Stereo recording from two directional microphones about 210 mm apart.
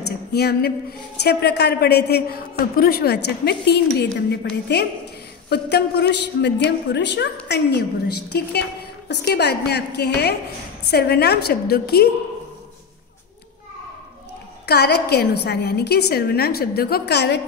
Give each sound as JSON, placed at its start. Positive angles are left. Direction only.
{"t": 0.3, "sound": "a woman's voice", "side_deg": 50}
{"t": 14.7, "sound": "a woman's voice", "side_deg": 50}